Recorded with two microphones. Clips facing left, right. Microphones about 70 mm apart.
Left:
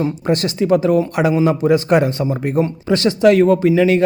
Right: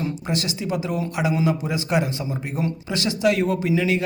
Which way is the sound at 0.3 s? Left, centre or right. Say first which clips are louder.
Left 13 dB; left.